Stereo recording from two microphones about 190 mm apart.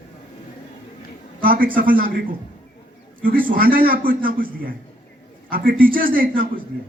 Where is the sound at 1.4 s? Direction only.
50° right (ahead or behind).